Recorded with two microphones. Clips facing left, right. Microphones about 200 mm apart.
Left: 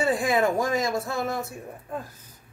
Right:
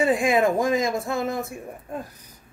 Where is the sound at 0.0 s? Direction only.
20° right (ahead or behind).